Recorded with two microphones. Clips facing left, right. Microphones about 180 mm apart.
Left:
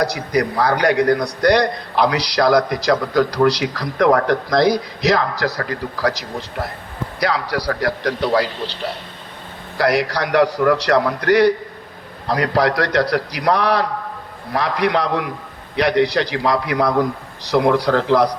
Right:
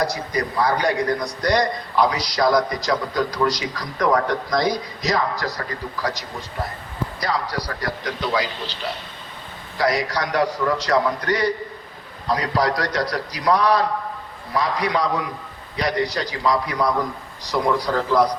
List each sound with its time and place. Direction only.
0.0 s a man's voice: 70° left (ahead or behind)
9.7 s a man's voice: 65° left (ahead or behind)